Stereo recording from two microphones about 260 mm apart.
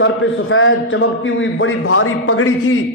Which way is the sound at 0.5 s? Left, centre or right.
Left.